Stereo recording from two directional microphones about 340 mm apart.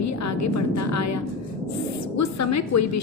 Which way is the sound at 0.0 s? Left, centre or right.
Left.